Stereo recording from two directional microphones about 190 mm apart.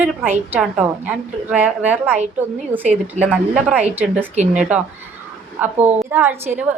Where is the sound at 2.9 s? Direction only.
35° right (ahead or behind).